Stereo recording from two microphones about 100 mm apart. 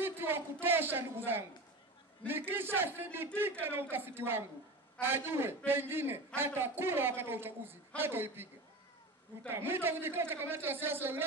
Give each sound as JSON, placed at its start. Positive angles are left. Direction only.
{"t": 0.0, "sound": "a woman's voice", "side_deg": -20}
{"t": 9.5, "sound": "a man's voice", "side_deg": -20}